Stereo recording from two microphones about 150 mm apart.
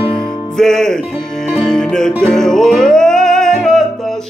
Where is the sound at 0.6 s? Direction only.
5° left (ahead or behind).